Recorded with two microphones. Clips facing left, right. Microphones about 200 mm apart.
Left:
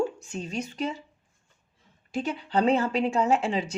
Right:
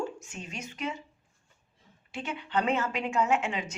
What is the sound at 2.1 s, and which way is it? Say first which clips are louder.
A woman's voice: left 4 dB; 35° left (ahead or behind).